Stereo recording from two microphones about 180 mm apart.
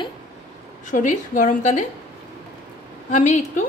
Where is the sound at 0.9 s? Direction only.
45° left (ahead or behind).